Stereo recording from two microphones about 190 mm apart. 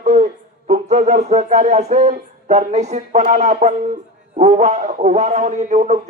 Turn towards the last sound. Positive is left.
turn(degrees=-40)  # may be behind; listen again after turning